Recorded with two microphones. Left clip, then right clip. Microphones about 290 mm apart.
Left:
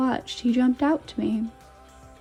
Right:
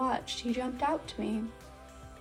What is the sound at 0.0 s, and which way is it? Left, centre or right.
Speech, left.